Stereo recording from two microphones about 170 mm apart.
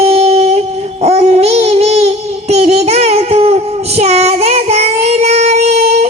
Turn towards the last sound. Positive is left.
turn(degrees=-40)  # may be behind; listen again after turning